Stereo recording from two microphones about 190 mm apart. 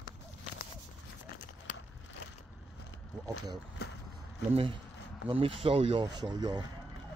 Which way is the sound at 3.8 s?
55° left (ahead or behind).